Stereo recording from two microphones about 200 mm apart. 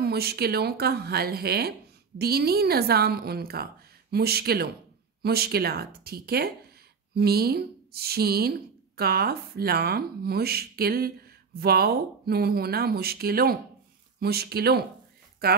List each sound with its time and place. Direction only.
0.0 s speech: 50° right (ahead or behind)